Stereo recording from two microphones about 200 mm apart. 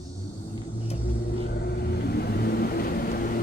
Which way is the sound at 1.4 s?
50° left (ahead or behind).